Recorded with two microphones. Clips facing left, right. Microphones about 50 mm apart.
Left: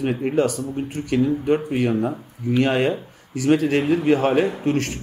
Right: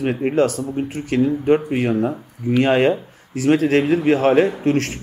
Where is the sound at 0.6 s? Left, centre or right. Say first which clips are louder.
Right 3 dB; right.